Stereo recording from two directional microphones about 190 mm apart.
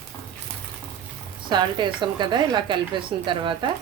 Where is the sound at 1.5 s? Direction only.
25° right (ahead or behind).